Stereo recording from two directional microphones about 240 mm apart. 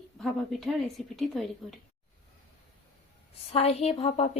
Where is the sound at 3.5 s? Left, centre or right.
Left.